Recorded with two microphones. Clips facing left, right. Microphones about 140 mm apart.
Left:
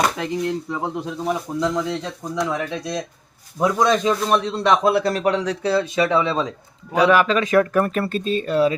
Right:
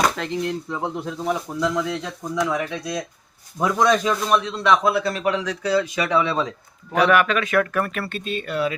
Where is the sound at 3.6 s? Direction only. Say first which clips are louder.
Left 1 dB; 20° left (ahead or behind).